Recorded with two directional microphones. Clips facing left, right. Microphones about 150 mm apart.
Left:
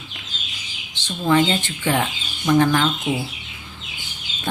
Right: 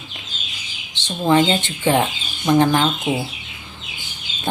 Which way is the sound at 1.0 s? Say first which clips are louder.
Right 2 dB; 25° right (ahead or behind).